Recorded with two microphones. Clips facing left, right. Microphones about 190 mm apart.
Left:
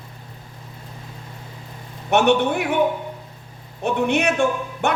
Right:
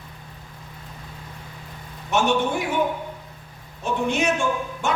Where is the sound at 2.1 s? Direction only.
65° left (ahead or behind).